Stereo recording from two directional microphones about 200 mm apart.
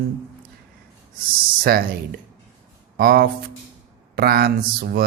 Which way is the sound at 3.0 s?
50° right (ahead or behind).